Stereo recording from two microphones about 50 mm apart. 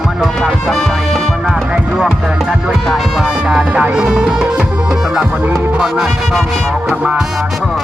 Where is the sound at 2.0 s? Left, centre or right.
Centre.